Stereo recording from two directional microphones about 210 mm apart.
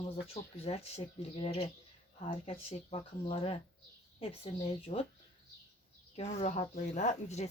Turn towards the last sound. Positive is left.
turn(degrees=35)  # may be behind; listen again after turning